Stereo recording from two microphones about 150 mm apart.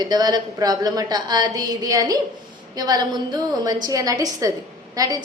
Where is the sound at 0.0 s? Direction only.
25° right (ahead or behind).